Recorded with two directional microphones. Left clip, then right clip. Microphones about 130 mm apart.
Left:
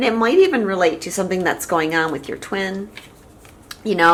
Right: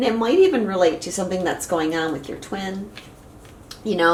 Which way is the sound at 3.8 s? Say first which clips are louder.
Left 4 dB; 40° left (ahead or behind).